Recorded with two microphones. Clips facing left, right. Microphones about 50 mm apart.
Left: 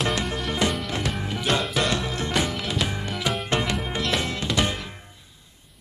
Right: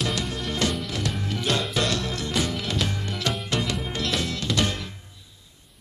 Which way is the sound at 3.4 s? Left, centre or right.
Left.